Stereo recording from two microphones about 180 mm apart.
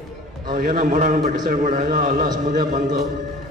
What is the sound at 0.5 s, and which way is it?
A man's voice, 50° right (ahead or behind).